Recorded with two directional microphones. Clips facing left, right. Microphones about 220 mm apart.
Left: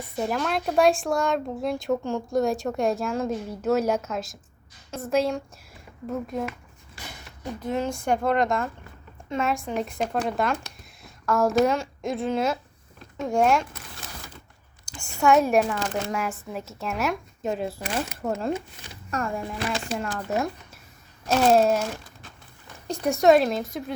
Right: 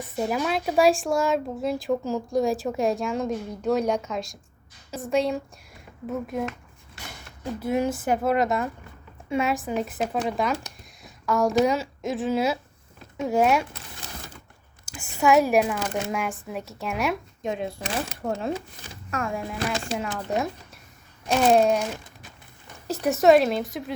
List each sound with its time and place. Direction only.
0.2 s speech: 5° right (ahead or behind)
7.4 s speech: 10° right (ahead or behind)
14.9 s a sound: 5° right (ahead or behind)
15.2 s speech: centre (ahead or behind)
22.9 s speech: centre (ahead or behind)